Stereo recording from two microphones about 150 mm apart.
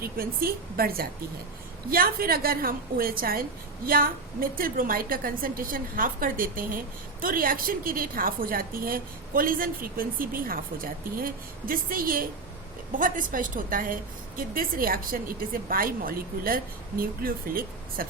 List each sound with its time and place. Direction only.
0.0 s a woman's voice: 80° right